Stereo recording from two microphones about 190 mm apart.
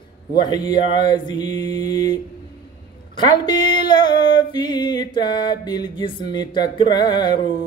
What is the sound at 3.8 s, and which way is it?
Music, 25° left (ahead or behind).